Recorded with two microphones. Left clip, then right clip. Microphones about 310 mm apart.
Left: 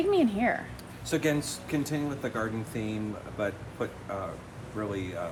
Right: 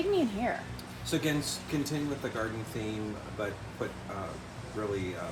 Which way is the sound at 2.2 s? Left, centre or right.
Left.